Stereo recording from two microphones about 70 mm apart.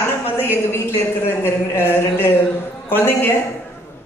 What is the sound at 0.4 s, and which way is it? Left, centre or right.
A woman's voice, left.